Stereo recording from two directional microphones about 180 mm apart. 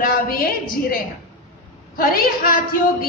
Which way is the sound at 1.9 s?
50° left (ahead or behind).